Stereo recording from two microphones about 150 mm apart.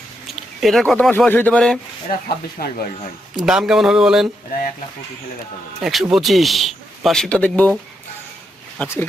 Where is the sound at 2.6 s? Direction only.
90° left.